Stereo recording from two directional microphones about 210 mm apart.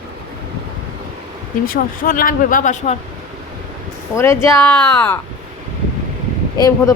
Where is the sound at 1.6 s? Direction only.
45° left (ahead or behind).